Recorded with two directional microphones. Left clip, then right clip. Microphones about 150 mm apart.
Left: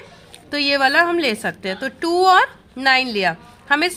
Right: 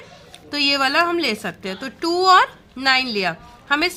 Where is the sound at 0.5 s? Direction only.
20° left (ahead or behind).